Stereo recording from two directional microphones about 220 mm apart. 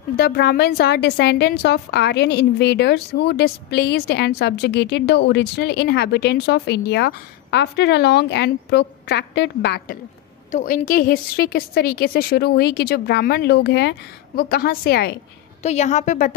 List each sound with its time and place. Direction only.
0.2 s a woman's voice: 45° left (ahead or behind)
10.5 s a woman's voice: 35° left (ahead or behind)
15.6 s a woman's voice: 30° left (ahead or behind)